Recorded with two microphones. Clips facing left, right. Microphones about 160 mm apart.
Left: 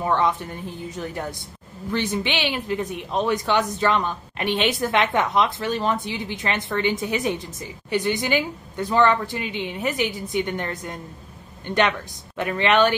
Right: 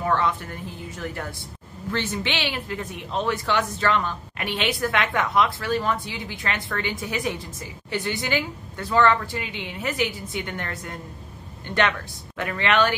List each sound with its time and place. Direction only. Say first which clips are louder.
0.0 s a man's voice: left 2 dB; 20° left (ahead or behind)